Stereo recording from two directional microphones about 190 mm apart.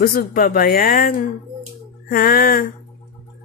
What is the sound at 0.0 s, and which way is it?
Speech, 50° left (ahead or behind).